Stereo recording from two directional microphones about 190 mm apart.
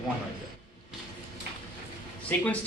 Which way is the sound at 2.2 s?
10° left (ahead or behind).